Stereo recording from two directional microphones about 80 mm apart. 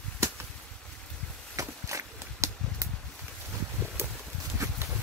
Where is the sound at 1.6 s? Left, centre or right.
Right.